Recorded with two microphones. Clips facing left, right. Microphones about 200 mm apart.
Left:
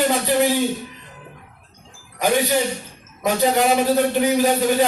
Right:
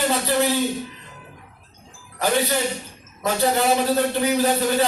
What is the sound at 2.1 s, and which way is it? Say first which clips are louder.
Speech: left 3 dB; 15° left (ahead or behind).